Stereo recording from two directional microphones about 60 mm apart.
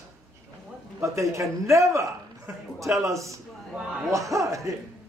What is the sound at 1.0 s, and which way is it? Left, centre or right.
A man's voice, right.